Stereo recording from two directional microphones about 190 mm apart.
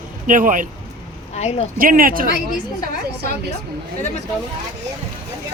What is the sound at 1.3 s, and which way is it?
Speech, 35° left (ahead or behind).